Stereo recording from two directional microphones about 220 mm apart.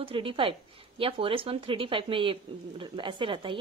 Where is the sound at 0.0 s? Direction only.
25° right (ahead or behind).